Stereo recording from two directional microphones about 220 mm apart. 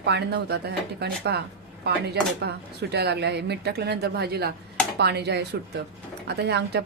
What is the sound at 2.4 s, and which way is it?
Speech, 50° right (ahead or behind).